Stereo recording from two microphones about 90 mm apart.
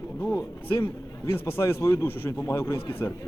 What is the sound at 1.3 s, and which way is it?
A man's voice, 25° left (ahead or behind).